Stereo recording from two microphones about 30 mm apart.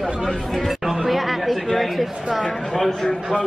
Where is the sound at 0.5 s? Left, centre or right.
Centre.